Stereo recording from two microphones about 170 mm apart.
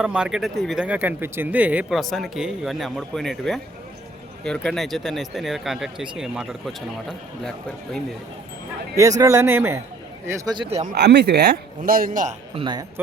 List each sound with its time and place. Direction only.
0.0 s speech: 5° right (ahead or behind)
9.0 s speech: 20° right (ahead or behind)
10.2 s speech: 25° right (ahead or behind)
10.9 s a man's voice: 80° right; by 12.3 s 55° right (ahead or behind)
12.5 s speech: 25° right (ahead or behind)